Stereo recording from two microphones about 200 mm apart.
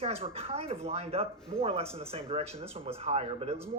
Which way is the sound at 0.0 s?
30° right (ahead or behind).